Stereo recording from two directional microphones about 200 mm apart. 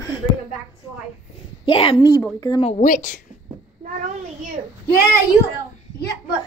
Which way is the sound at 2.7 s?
35° left (ahead or behind).